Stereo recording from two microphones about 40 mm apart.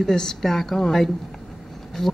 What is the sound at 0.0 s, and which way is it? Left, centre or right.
Speech, centre.